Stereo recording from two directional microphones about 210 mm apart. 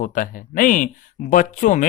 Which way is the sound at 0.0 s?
40° left (ahead or behind).